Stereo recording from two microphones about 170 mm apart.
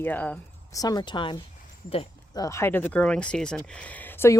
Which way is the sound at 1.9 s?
35° left (ahead or behind).